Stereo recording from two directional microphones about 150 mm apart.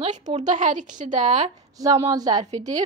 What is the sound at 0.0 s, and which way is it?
Speech, 50° right (ahead or behind).